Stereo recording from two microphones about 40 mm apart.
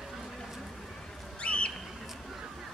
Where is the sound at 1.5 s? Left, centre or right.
Left.